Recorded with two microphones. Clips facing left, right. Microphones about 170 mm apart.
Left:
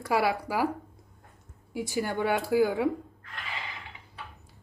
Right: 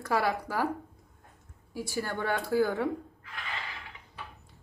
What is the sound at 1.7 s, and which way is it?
Speech, 20° left (ahead or behind).